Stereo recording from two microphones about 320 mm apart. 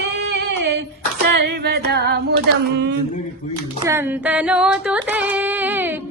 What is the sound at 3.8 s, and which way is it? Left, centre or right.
Female singing, centre.